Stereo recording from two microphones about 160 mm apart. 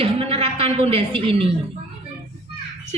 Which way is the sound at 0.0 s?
35° right (ahead or behind).